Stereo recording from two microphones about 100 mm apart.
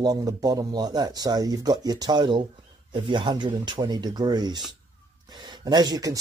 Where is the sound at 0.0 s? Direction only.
40° right (ahead or behind).